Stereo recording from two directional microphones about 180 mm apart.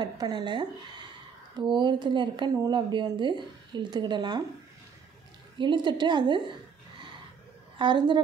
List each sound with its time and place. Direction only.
0.0 s speech: 25° right (ahead or behind)
5.6 s speech: 25° right (ahead or behind)
7.8 s speech: 25° right (ahead or behind)